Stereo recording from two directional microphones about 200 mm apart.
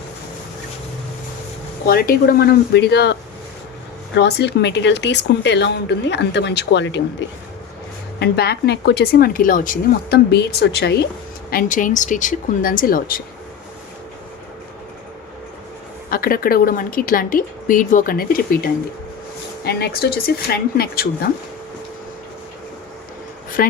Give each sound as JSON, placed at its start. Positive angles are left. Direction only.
{"t": 1.9, "sound": "a woman's voice", "side_deg": 45}
{"t": 11.5, "sound": "speech", "side_deg": 40}
{"t": 16.0, "sound": "a woman's voice", "side_deg": 45}
{"t": 23.6, "sound": "speech", "side_deg": 45}